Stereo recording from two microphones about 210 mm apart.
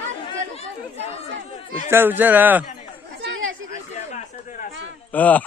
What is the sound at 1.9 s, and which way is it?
Speech, 10° right (ahead or behind).